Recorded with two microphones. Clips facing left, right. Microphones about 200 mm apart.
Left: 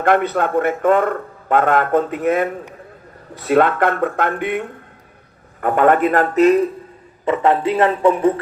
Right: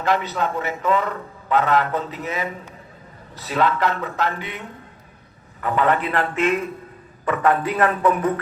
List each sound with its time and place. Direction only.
0.0 s a man's voice: 55° left (ahead or behind); by 6.7 s 35° left (ahead or behind)
7.3 s a man's voice: 25° left (ahead or behind)